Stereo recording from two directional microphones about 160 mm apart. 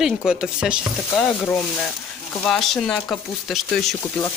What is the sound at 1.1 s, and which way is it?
Speech, 10° left (ahead or behind).